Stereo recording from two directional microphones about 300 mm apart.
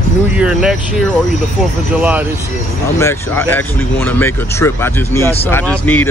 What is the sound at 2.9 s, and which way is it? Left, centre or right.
Speech, centre.